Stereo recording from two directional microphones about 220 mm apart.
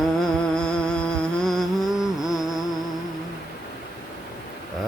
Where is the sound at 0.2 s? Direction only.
5° left (ahead or behind).